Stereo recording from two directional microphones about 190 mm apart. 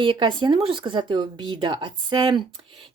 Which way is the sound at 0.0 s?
25° right (ahead or behind).